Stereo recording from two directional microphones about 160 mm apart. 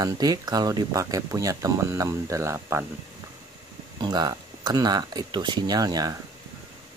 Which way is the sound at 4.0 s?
25° right (ahead or behind).